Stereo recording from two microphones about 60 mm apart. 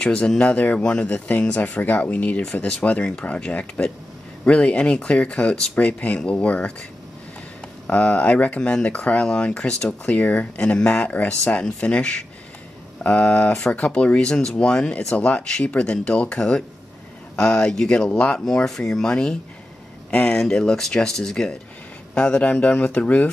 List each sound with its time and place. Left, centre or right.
0.0 s speech: centre
7.9 s speech: left
20.1 s speech: left
20.3 s speech: centre
22.1 s speech: left